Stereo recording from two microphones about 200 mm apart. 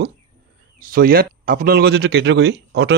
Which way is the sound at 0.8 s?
45° right (ahead or behind).